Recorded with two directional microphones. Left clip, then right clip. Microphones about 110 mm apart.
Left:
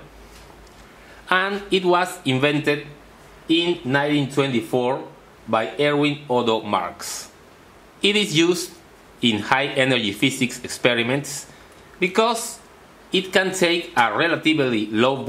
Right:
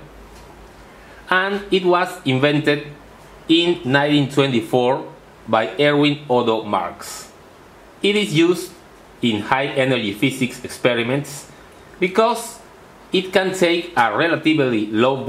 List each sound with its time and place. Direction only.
1.2 s speech: 10° left (ahead or behind)
6.5 s speech: 30° left (ahead or behind)